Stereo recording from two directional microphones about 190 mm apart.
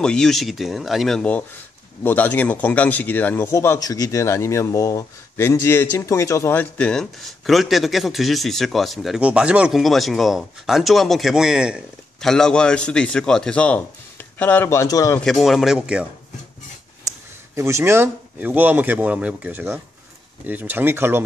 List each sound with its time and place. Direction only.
0.0 s speech: 5° left (ahead or behind)
15.2 s speech: centre (ahead or behind)
17.6 s speech: 15° right (ahead or behind)